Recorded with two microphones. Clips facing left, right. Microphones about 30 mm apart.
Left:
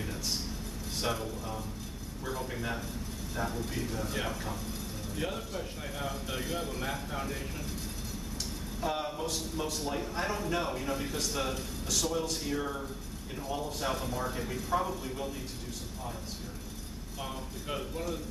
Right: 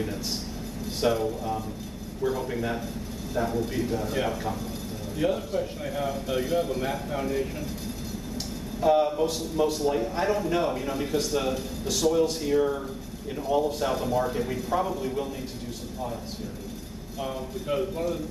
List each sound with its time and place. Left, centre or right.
1.0 s a man's voice: centre
2.2 s a man's voice: centre
8.8 s a man's voice: centre
17.2 s a man's voice: centre